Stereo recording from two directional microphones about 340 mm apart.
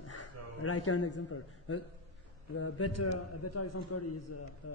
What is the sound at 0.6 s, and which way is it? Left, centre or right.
A man's voice, left.